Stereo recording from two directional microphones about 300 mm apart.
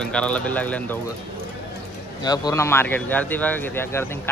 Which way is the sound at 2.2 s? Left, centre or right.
Centre.